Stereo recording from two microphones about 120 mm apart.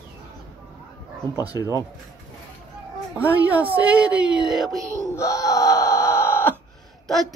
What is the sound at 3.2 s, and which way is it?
Speech, 15° right (ahead or behind).